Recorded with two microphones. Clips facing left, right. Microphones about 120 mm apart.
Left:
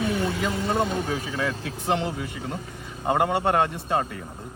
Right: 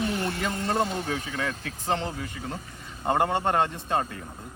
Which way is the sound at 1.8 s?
15° left (ahead or behind).